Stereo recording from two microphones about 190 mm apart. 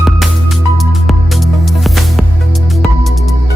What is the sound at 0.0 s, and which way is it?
Music, centre (ahead or behind).